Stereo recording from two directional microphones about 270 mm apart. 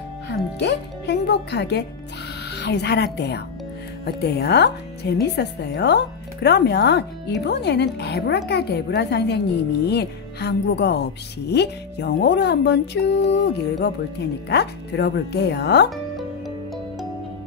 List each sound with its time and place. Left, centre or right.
0.6 s a woman's voice: left